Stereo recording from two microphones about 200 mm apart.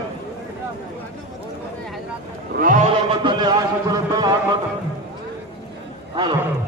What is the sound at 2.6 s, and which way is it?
Speech, 40° right (ahead or behind).